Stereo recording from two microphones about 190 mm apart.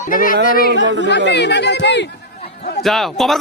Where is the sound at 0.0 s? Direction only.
45° left (ahead or behind).